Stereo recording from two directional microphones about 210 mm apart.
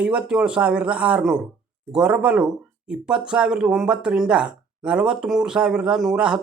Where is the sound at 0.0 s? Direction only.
5° right (ahead or behind).